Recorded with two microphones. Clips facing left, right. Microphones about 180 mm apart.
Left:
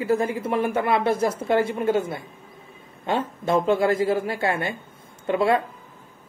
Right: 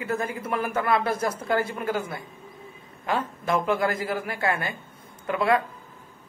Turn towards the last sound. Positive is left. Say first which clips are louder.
# left 2 dB
turn(degrees=25)  # may be behind; listen again after turning